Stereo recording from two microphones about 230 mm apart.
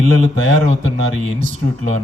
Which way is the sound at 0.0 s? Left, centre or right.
Right.